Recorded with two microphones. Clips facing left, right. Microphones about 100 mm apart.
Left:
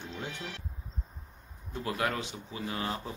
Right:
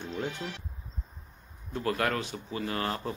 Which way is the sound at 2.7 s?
55° right (ahead or behind).